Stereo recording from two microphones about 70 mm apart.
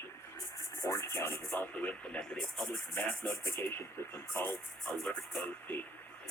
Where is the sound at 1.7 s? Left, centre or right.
Centre.